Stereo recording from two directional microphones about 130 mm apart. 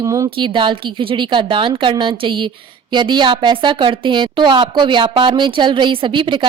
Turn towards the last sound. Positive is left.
turn(degrees=-40)  # may be behind; listen again after turning